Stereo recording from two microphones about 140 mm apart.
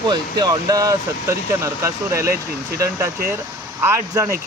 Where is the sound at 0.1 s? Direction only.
30° right (ahead or behind).